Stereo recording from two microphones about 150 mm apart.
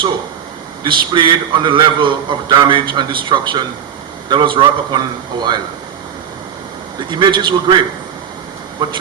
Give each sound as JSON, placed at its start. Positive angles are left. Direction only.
{"t": 0.9, "sound": "a man's voice", "side_deg": -30}
{"t": 7.1, "sound": "a man's voice", "side_deg": -30}
{"t": 8.8, "sound": "a man's voice", "side_deg": -30}